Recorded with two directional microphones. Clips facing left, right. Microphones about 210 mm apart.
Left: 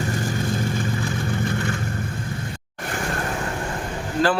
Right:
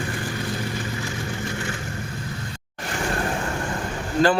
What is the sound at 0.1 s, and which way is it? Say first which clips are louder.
Vehicle: left 4 dB; 45° left (ahead or behind).